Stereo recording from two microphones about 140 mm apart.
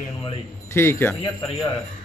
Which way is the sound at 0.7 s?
20° left (ahead or behind).